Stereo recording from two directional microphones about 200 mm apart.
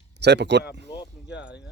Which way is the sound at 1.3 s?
60° left (ahead or behind).